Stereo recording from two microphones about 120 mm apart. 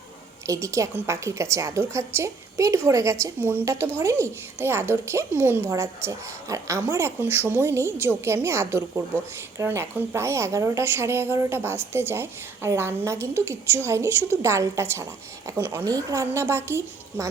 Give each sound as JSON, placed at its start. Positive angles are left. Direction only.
{"t": 0.4, "sound": "a woman's voice", "side_deg": -25}
{"t": 15.8, "sound": "a woman's voice", "side_deg": -30}